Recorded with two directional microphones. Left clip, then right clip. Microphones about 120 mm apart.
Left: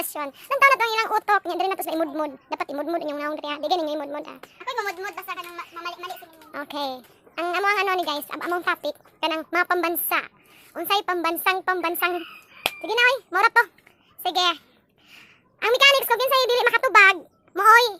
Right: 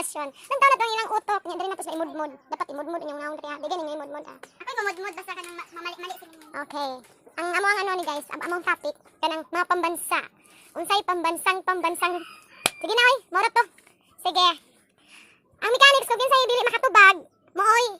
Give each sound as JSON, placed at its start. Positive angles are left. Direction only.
{"t": 0.0, "sound": "speech", "side_deg": 15}
{"t": 4.5, "sound": "a woman's voice", "side_deg": 10}